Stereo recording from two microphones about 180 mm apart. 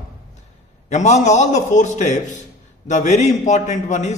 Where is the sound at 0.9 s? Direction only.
40° left (ahead or behind).